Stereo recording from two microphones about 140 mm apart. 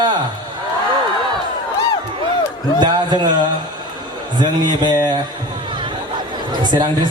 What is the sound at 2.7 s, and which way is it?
A man's voice, 30° right (ahead or behind).